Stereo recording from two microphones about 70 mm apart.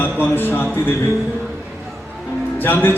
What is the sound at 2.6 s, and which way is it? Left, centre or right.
Speech, left.